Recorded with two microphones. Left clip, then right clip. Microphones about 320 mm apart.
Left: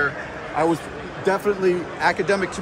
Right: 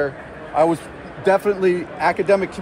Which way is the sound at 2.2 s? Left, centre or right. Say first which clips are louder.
Right 4 dB; right.